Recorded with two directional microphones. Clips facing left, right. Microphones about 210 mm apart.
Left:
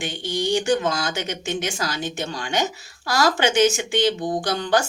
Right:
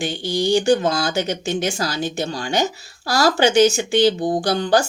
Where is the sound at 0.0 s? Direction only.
35° right (ahead or behind).